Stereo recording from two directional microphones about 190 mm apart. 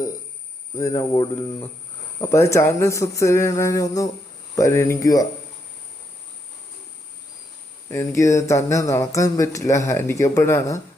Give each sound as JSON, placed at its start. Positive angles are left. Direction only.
{"t": 0.8, "sound": "speech", "side_deg": 15}
{"t": 7.9, "sound": "speech", "side_deg": 15}